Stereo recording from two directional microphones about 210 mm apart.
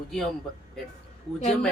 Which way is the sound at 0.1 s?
Centre (ahead or behind).